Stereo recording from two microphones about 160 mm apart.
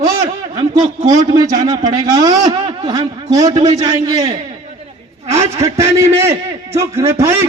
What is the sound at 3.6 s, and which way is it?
Speech, 45° right (ahead or behind).